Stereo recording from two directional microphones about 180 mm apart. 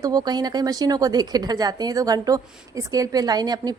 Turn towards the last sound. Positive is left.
turn(degrees=-20)  # may be behind; listen again after turning